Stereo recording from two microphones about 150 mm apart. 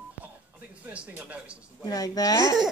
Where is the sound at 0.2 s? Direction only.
10° right (ahead or behind).